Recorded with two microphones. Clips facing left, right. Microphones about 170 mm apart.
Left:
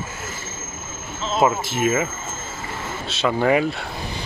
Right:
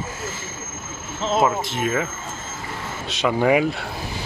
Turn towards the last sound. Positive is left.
turn(degrees=-10)  # may be behind; listen again after turning